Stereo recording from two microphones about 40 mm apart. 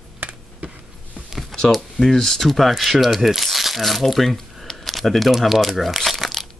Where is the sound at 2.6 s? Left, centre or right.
Centre.